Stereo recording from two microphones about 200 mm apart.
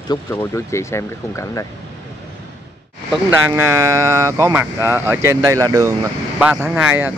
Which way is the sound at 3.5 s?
15° right (ahead or behind).